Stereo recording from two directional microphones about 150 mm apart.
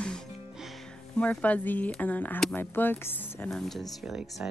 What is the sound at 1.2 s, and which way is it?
A woman's voice, 10° left (ahead or behind).